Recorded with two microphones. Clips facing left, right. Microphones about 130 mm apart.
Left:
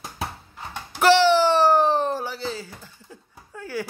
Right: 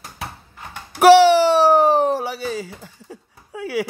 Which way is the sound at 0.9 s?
70° right (ahead or behind).